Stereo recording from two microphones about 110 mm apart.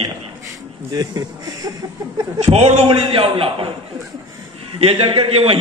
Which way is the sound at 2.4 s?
90° right.